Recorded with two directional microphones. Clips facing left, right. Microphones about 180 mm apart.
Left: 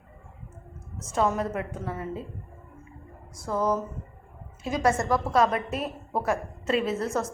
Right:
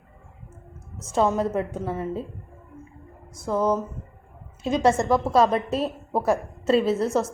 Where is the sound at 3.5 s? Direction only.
25° right (ahead or behind).